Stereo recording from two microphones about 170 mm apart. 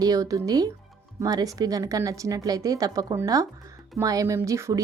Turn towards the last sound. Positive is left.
turn(degrees=-20)  # may be behind; listen again after turning